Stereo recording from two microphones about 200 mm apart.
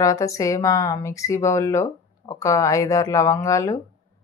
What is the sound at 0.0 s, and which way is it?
Speech, 15° left (ahead or behind).